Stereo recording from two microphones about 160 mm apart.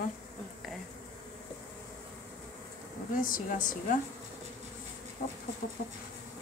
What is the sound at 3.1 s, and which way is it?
Speech, 55° left (ahead or behind).